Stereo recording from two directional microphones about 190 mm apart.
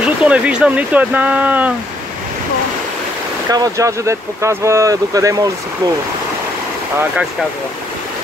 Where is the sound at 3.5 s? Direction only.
20° right (ahead or behind).